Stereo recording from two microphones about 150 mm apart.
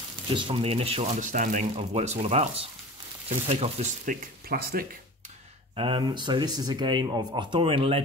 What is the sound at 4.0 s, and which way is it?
Speech, 75° right (ahead or behind).